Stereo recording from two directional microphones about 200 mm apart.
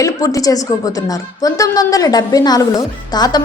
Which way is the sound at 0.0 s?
15° left (ahead or behind).